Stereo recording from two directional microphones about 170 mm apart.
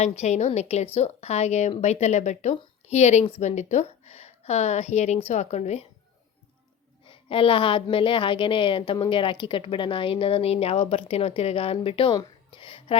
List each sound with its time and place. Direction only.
0.0 s a woman's voice: 40° left (ahead or behind)
7.1 s a woman's voice: 30° left (ahead or behind)